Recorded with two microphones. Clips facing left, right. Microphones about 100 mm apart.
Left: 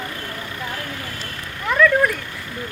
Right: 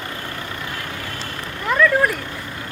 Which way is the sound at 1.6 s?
5° right (ahead or behind).